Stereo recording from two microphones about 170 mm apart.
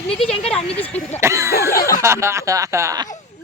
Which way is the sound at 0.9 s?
40° left (ahead or behind).